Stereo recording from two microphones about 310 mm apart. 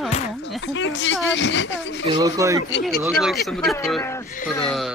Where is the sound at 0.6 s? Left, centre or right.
Left.